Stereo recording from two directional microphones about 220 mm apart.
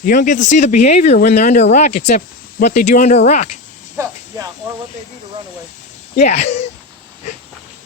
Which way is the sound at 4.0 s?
10° right (ahead or behind).